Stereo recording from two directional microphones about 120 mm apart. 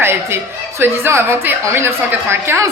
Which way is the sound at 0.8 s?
20° right (ahead or behind).